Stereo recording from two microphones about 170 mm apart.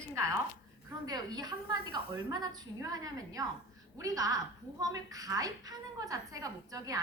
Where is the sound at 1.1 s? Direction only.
25° right (ahead or behind).